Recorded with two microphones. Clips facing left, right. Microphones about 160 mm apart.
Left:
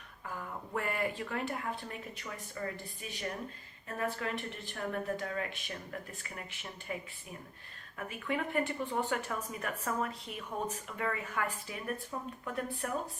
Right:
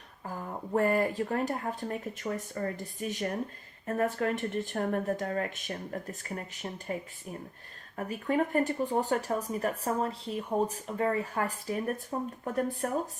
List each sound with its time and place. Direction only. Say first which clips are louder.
0.3 s speech: right 6 dB; 35° right (ahead or behind)